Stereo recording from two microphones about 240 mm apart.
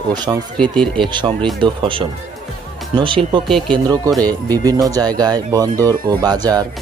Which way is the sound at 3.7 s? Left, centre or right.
Centre.